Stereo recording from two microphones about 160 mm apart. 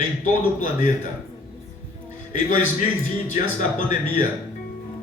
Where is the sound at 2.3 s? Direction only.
50° left (ahead or behind).